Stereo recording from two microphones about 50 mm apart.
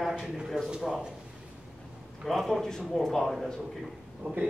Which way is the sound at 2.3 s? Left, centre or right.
Centre.